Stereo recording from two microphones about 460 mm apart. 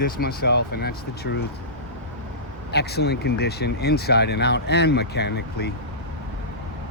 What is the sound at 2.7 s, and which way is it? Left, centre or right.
Speech, left.